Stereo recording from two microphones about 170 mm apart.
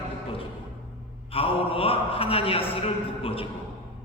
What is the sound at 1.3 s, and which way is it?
A man's voice, 35° left (ahead or behind).